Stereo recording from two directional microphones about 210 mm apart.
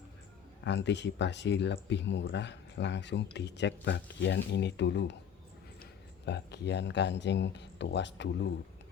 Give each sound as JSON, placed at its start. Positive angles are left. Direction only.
{"t": 0.6, "sound": "speech", "side_deg": 55}